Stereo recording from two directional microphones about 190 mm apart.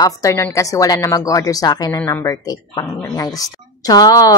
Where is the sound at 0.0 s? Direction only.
15° left (ahead or behind).